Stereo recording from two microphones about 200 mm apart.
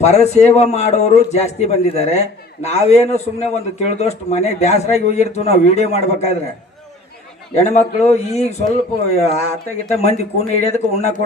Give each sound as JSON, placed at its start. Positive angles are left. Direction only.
{"t": 0.0, "sound": "a man's voice", "side_deg": 35}
{"t": 7.5, "sound": "a man's voice", "side_deg": 35}